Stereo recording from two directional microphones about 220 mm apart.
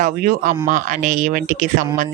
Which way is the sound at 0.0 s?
35° right (ahead or behind).